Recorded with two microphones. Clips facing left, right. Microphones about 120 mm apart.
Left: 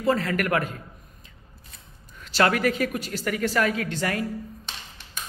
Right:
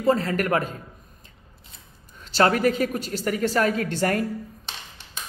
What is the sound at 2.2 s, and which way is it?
A woman's voice, 30° right (ahead or behind).